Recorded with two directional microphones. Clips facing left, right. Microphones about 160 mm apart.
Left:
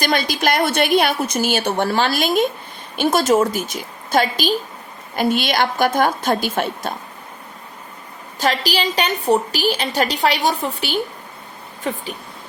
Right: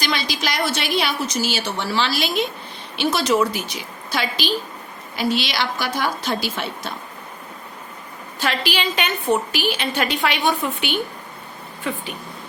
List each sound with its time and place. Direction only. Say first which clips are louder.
0.0 s a woman's voice: left 5 dB; 50° left (ahead or behind)
8.4 s a woman's voice: left 3 dB; 40° left (ahead or behind)